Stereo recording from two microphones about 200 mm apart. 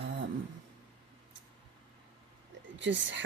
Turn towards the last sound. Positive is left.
turn(degrees=-65)  # may be behind; listen again after turning